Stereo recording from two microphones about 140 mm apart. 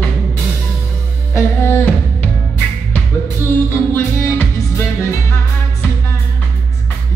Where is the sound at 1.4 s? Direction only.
15° left (ahead or behind).